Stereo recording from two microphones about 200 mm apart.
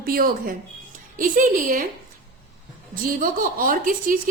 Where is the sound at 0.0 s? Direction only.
50° right (ahead or behind).